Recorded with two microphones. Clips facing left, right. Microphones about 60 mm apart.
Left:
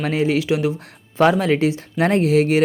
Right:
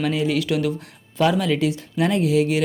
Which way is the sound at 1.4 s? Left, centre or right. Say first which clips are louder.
Left 3 dB; left.